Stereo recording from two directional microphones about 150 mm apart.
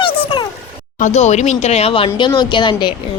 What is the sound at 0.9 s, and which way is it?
A woman's voice, 50° left (ahead or behind).